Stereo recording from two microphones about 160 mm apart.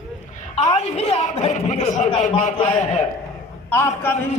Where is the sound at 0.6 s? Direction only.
40° left (ahead or behind).